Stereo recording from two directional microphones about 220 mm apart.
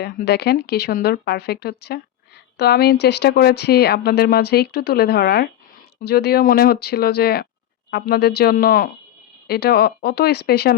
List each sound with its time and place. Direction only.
0.0 s speech: 45° left (ahead or behind)